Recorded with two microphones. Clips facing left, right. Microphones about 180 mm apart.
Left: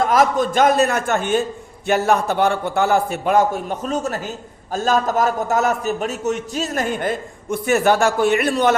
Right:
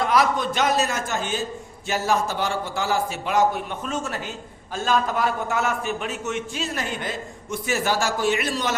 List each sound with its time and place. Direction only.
0.0 s a man's voice: 45° left (ahead or behind)